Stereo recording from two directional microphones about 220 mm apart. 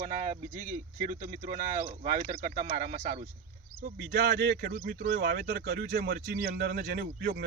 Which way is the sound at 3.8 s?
45° right (ahead or behind).